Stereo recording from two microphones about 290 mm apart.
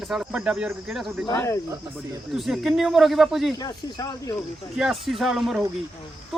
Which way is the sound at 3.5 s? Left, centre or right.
Centre.